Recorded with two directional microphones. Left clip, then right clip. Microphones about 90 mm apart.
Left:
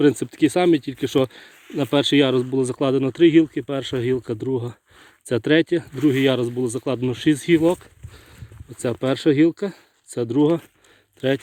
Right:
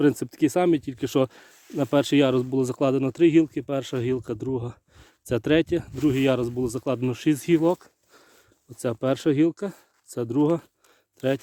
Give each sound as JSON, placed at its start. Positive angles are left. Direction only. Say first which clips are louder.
{"t": 0.1, "sound": "speech", "louder": "left 4 dB", "side_deg": -60}
{"t": 0.6, "sound": "speech", "louder": "left 4 dB", "side_deg": -30}
{"t": 0.9, "sound": "speech", "louder": "left 3 dB", "side_deg": -45}
{"t": 8.8, "sound": "speech", "louder": "left 3 dB", "side_deg": -35}